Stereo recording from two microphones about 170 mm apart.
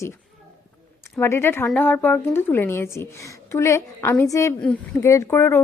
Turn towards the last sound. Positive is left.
turn(degrees=15)  # may be behind; listen again after turning